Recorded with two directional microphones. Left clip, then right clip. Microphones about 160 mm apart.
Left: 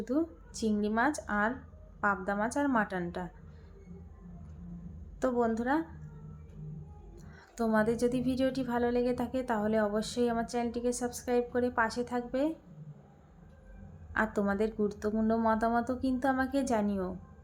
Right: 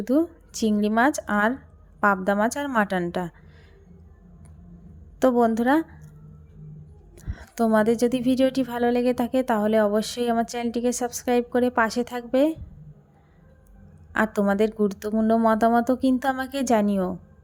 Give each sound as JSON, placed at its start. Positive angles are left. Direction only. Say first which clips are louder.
{"t": 0.0, "sound": "speech", "louder": "right 10 dB", "side_deg": -55}
{"t": 5.2, "sound": "speech", "louder": "right 10 dB", "side_deg": -55}
{"t": 7.2, "sound": "a woman's voice", "louder": "right 10 dB", "side_deg": -50}
{"t": 14.1, "sound": "a woman's voice", "louder": "right 8 dB", "side_deg": -50}